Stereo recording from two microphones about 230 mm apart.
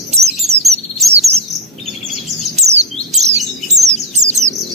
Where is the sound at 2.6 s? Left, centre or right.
Right.